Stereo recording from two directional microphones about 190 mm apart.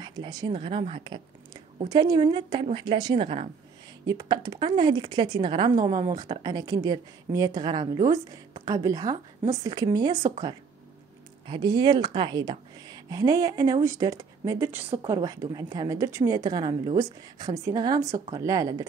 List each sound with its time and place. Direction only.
0.0 s speech: 20° right (ahead or behind)
4.0 s speech: 20° right (ahead or behind)
11.4 s speech: 25° right (ahead or behind)
14.9 s speech: 25° right (ahead or behind)